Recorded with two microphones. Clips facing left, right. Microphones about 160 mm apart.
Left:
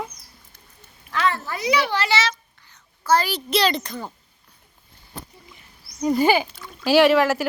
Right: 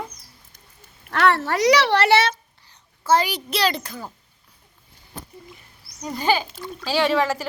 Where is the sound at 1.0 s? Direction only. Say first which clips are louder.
Right 4 dB; 75° right (ahead or behind).